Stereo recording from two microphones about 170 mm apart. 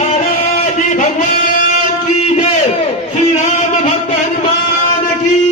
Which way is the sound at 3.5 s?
45° left (ahead or behind).